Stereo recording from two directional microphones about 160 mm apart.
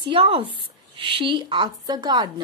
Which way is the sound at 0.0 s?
30° right (ahead or behind).